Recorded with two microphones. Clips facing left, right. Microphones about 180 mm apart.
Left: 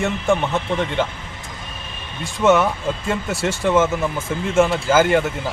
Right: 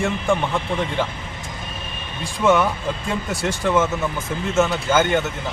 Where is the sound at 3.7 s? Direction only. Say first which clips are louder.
Left 2 dB; 5° left (ahead or behind).